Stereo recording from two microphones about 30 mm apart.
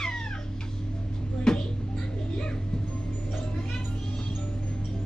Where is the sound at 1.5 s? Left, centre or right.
Left.